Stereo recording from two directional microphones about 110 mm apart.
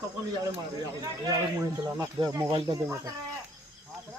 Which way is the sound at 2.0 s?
35° right (ahead or behind).